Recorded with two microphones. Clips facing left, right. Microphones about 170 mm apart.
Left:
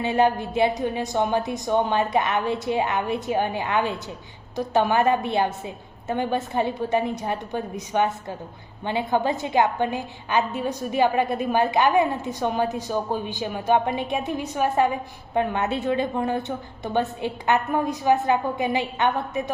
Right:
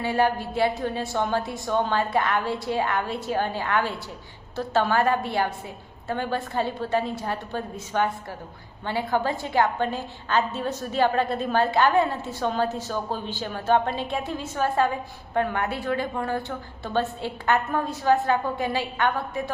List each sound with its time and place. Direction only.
0.0 s a woman's voice: 20° left (ahead or behind)